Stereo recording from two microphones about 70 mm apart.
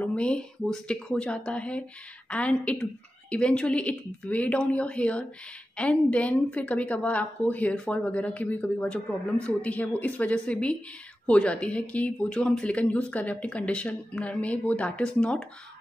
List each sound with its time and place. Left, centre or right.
0.0 s a woman's voice: centre